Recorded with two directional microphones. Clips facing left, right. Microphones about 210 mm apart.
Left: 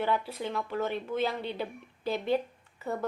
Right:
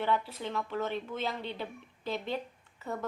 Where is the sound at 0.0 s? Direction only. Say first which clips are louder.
Left 1 dB; 5° left (ahead or behind).